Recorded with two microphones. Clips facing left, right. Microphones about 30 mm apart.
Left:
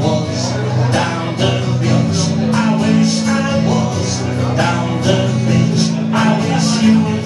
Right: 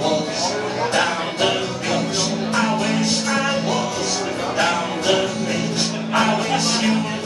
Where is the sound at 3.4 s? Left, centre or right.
Centre.